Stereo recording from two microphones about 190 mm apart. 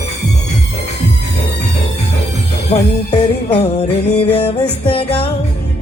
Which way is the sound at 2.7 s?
35° left (ahead or behind).